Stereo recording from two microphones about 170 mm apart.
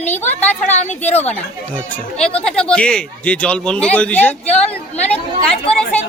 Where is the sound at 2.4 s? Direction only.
5° left (ahead or behind).